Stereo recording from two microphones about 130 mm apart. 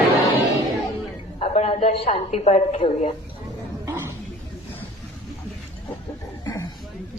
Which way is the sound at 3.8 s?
20° right (ahead or behind).